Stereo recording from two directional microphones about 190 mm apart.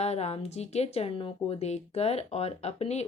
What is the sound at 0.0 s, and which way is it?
A woman's voice, 35° left (ahead or behind).